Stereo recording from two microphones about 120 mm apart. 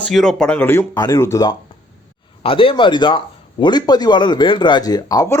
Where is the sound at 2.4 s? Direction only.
50° left (ahead or behind).